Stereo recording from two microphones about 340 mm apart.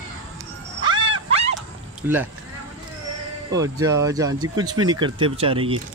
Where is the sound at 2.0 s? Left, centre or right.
Centre.